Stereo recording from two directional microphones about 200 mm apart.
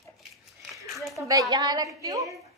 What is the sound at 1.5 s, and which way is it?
Speech, 20° right (ahead or behind).